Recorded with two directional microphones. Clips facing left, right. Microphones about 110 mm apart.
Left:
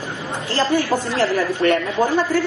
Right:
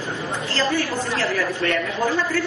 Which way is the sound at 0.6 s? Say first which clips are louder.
Left 5 dB; 15° left (ahead or behind).